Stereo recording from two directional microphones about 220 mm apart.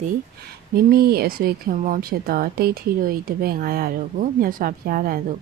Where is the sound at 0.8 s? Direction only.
45° right (ahead or behind).